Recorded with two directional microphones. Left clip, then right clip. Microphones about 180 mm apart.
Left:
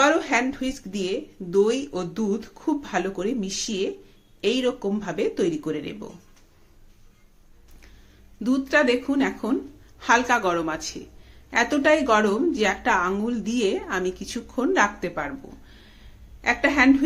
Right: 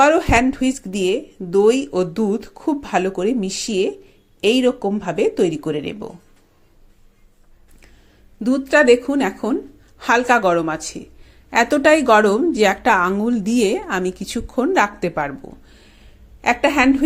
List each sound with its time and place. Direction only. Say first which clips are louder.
0.0 s speech: right 6 dB; 40° right (ahead or behind)
8.4 s a woman's voice: right 8 dB; 30° right (ahead or behind)
16.4 s speech: right 4 dB; 40° right (ahead or behind)